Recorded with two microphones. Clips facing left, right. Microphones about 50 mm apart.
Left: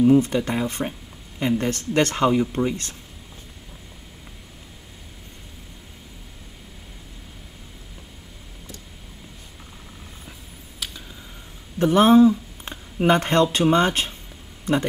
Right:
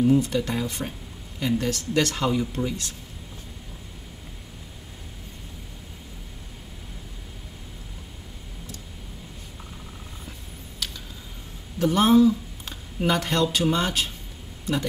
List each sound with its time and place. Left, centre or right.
0.0 s speech: left
10.8 s a sound: centre
11.8 s speech: left